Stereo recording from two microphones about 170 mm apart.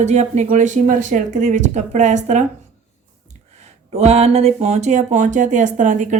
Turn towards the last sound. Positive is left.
turn(degrees=-45)  # may be behind; listen again after turning